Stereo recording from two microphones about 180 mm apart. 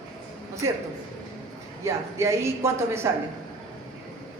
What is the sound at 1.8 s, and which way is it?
A woman's voice, 15° right (ahead or behind).